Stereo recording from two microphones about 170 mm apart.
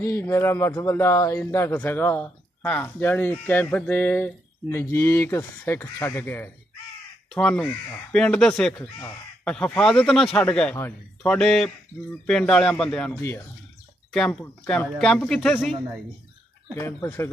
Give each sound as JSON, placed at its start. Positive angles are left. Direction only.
{"t": 0.0, "sound": "speech", "side_deg": 15}
{"t": 13.1, "sound": "speech", "side_deg": 15}
{"t": 14.1, "sound": "speech", "side_deg": 5}
{"t": 16.7, "sound": "speech", "side_deg": 15}